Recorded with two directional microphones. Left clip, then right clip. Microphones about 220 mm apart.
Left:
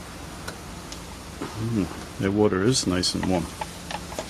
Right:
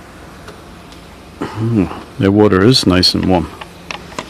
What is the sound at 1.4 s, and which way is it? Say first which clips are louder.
Speech: right 12 dB; 40° right (ahead or behind).